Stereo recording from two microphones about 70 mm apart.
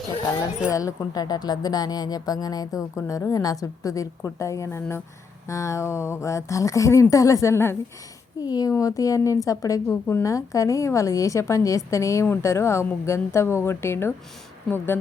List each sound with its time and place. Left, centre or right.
0.7 s speech: left
2.9 s speech: left
8.4 s speech: left
8.7 s speech: left